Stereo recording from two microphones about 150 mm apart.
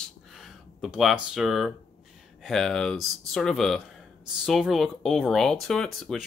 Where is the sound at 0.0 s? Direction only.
Centre (ahead or behind).